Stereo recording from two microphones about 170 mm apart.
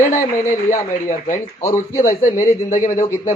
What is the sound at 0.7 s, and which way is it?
A man's voice, 50° left (ahead or behind).